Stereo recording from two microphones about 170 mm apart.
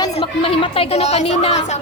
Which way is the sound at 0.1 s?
35° left (ahead or behind).